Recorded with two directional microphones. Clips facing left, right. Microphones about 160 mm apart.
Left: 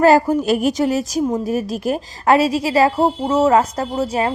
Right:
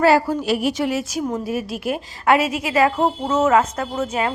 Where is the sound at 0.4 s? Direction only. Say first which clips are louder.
Left 4 dB; 45° left (ahead or behind).